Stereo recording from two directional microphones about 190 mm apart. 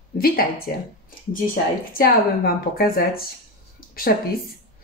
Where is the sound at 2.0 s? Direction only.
50° left (ahead or behind).